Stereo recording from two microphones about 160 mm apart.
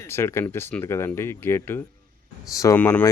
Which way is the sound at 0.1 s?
15° left (ahead or behind).